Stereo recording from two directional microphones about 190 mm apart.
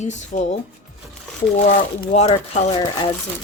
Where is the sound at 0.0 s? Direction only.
40° left (ahead or behind).